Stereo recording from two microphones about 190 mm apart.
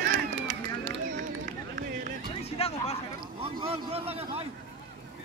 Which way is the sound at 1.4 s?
50° right (ahead or behind).